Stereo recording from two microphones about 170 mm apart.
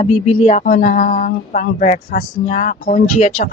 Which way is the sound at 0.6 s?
55° left (ahead or behind).